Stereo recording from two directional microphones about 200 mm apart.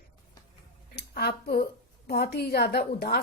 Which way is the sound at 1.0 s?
55° left (ahead or behind).